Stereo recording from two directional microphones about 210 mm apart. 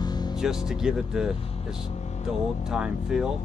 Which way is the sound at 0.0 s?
20° left (ahead or behind).